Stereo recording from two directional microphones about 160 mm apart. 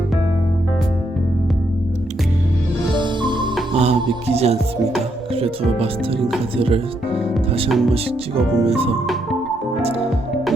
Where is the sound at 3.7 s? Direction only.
40° right (ahead or behind).